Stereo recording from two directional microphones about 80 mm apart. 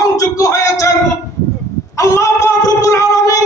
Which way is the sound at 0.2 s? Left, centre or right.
Left.